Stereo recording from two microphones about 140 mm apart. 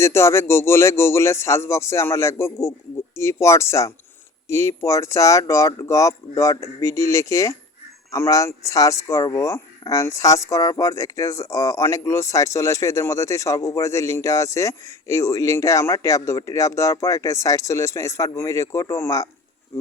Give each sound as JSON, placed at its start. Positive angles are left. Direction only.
{"t": 0.0, "sound": "speech", "side_deg": 20}